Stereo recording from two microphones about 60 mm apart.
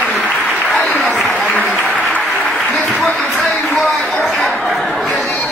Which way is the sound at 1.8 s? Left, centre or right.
Centre.